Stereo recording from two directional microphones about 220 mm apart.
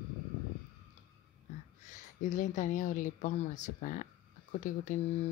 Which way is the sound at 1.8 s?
35° left (ahead or behind).